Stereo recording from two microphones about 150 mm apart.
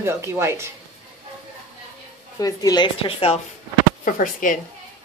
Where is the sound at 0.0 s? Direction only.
20° right (ahead or behind).